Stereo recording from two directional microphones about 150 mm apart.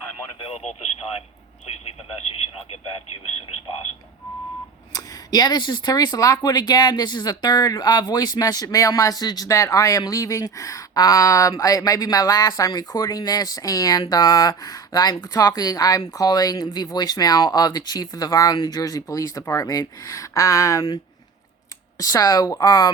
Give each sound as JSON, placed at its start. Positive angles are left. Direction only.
{"t": 0.4, "sound": "speech", "side_deg": 45}
{"t": 4.9, "sound": "speech", "side_deg": 25}
{"t": 21.9, "sound": "speech", "side_deg": 25}